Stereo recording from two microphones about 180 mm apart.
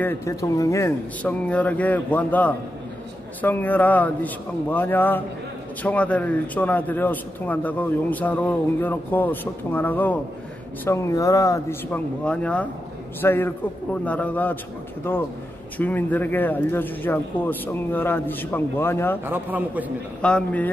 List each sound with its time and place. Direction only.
0.0 s a man's voice: 15° left (ahead or behind)
12.3 s a man's voice: 5° left (ahead or behind)
19.2 s a man's voice: 10° right (ahead or behind)
20.2 s a man's voice: 5° left (ahead or behind)